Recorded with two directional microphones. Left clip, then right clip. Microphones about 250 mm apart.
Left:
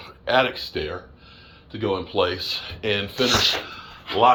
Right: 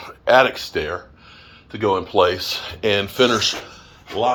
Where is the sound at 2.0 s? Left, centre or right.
Right.